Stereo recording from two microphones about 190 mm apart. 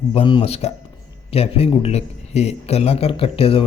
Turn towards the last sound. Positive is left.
turn(degrees=30)  # may be behind; listen again after turning